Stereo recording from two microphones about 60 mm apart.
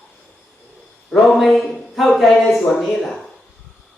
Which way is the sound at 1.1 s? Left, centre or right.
Centre.